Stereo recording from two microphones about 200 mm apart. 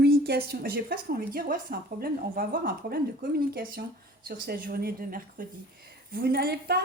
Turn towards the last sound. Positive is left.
turn(degrees=-55)  # may be behind; listen again after turning